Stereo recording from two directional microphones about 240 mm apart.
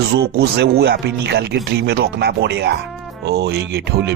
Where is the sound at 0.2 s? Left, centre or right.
Right.